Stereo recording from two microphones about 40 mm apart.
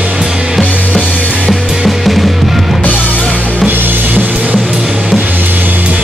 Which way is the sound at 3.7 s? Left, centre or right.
Right.